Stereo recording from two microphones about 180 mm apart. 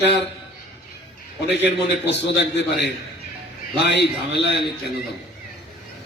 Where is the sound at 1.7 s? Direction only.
75° left (ahead or behind).